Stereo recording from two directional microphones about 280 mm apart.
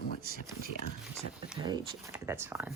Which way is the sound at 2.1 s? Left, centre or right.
Centre.